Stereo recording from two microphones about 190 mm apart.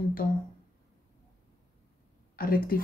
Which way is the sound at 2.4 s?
50° left (ahead or behind).